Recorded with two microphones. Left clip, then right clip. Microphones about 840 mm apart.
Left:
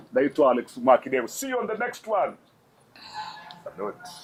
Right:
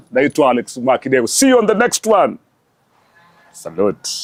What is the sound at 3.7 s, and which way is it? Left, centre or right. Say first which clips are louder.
Speech: right 15 dB; right.